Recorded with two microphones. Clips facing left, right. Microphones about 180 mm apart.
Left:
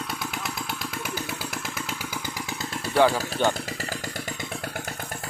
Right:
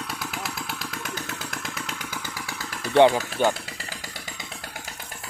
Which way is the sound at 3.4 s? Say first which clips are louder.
Right 1 dB; 10° right (ahead or behind).